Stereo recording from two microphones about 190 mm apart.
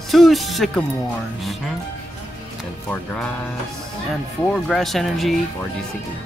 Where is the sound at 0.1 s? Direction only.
Centre (ahead or behind).